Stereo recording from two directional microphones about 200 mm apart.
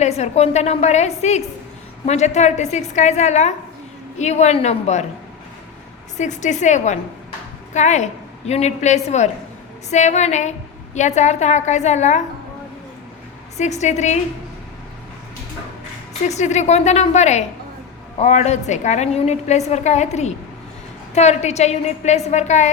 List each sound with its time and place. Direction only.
0.0 s a woman's voice: 35° left (ahead or behind)
6.1 s a woman's voice: 35° left (ahead or behind)
13.6 s a woman's voice: 35° left (ahead or behind)
16.2 s a woman's voice: 35° left (ahead or behind)